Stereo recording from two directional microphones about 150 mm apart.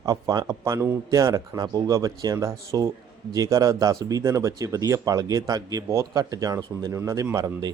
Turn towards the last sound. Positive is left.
turn(degrees=-20)  # may be behind; listen again after turning